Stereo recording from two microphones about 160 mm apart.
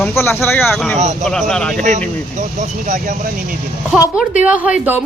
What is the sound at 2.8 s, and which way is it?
Speech, 55° right (ahead or behind).